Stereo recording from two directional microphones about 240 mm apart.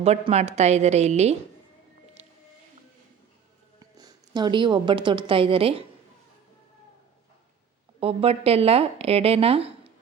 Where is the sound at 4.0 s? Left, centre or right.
Centre.